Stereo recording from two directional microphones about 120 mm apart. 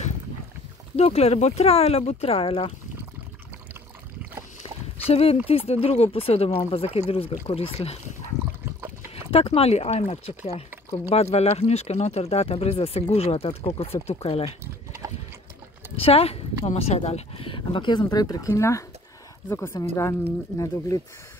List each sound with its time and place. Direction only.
0.9 s speech: 60° left (ahead or behind)
5.0 s speech: 55° left (ahead or behind)
9.3 s speech: 55° left (ahead or behind)
16.0 s speech: 55° left (ahead or behind); by 21.0 s 30° left (ahead or behind)